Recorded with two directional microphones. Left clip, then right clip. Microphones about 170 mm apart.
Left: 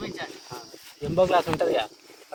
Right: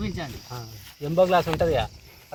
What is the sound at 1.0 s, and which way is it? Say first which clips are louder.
Speech: right 1 dB; centre (ahead or behind).